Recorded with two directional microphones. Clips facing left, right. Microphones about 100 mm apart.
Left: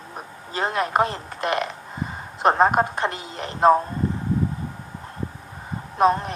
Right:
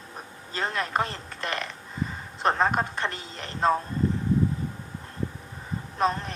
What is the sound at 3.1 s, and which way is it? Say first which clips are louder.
Speech: left 6 dB; 20° left (ahead or behind).